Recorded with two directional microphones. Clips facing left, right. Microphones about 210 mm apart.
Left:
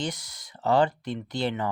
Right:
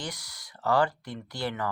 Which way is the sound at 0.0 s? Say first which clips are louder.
Left 6 dB; 20° left (ahead or behind).